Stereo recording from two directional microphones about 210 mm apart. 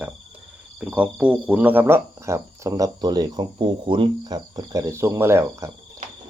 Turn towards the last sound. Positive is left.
turn(degrees=-10)  # may be behind; listen again after turning